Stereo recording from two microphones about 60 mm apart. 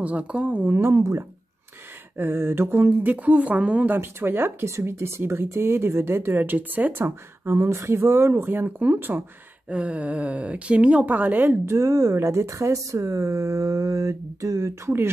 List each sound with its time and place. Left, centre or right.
0.0 s speech: right
0.7 s speech: right
2.1 s speech: right
4.6 s speech: right
7.6 s speech: right
9.7 s speech: centre; by 11.6 s right
11.6 s speech: right